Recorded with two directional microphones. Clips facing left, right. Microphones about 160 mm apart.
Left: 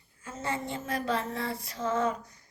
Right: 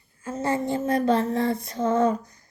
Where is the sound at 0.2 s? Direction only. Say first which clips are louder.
Right 8 dB; 40° right (ahead or behind).